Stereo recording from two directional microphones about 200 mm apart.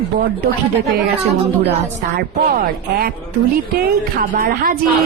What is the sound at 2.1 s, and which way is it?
Speech, 50° right (ahead or behind).